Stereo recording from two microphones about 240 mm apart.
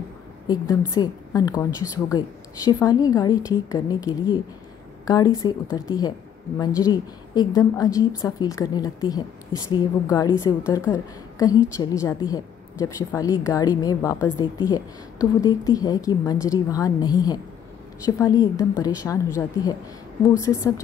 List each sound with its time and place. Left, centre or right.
0.5 s a woman's voice: centre